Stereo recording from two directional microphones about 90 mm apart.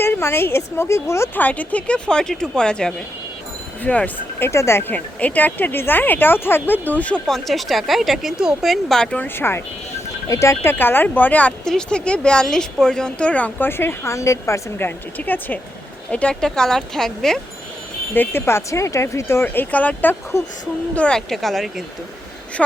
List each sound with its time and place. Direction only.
0.0 s a woman's voice: 30° left (ahead or behind)
1.4 s a woman's voice: 15° left (ahead or behind)
4.4 s a woman's voice: 30° left (ahead or behind)
7.3 s speech: 5° left (ahead or behind); by 9.6 s 25° left (ahead or behind)
10.2 s a woman's voice: 35° left (ahead or behind); by 17.4 s 5° left (ahead or behind)
18.1 s a woman's voice: 25° left (ahead or behind)
19.7 s a woman's voice: 15° left (ahead or behind); by 21.8 s centre (ahead or behind)